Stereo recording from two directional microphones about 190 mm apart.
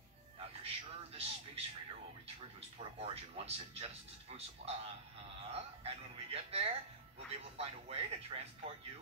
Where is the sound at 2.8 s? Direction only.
30° right (ahead or behind).